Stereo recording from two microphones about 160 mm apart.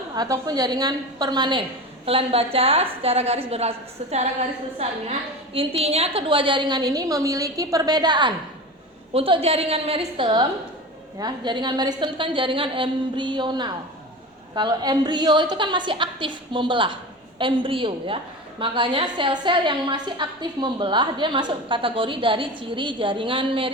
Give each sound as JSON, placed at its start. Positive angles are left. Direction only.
{"t": 0.2, "sound": "a woman's voice", "side_deg": -25}
{"t": 2.0, "sound": "a woman's voice", "side_deg": -40}
{"t": 5.5, "sound": "a woman's voice", "side_deg": -40}